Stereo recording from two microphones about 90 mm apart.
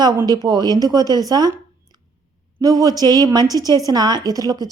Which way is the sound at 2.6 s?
45° right (ahead or behind).